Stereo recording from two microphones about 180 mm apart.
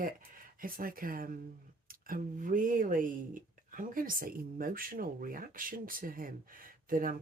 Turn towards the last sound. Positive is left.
turn(degrees=-50)  # may be behind; listen again after turning